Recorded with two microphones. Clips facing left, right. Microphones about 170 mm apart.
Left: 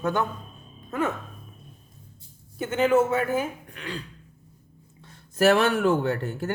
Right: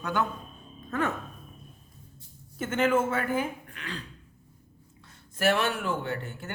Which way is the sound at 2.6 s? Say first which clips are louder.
Left 4 dB; 15° left (ahead or behind).